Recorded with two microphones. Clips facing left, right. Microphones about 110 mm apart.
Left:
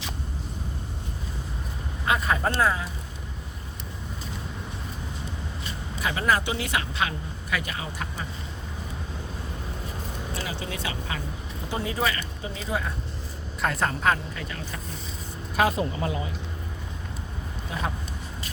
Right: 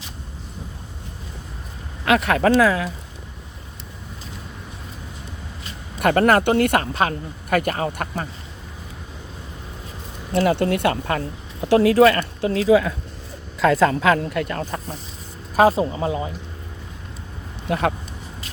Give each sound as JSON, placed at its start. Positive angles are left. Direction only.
{"t": 2.0, "sound": "speech", "side_deg": -80}
{"t": 6.0, "sound": "speech", "side_deg": -60}
{"t": 10.3, "sound": "speech", "side_deg": -60}
{"t": 11.7, "sound": "speech", "side_deg": -90}
{"t": 14.4, "sound": "speech", "side_deg": -50}
{"t": 15.5, "sound": "speech", "side_deg": -35}
{"t": 17.7, "sound": "speech", "side_deg": -70}